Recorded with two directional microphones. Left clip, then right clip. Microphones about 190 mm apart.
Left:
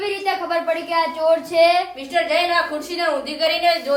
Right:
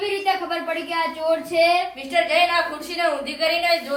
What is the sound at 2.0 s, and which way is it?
A woman's voice, 60° left (ahead or behind).